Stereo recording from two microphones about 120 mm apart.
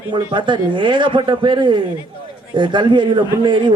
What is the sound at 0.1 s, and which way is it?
A man's voice, 40° right (ahead or behind).